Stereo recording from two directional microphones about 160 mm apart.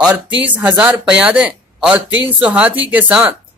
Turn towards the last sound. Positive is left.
turn(degrees=-5)  # may be behind; listen again after turning